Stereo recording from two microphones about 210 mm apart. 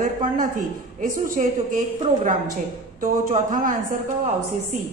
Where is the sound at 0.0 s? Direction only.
40° right (ahead or behind).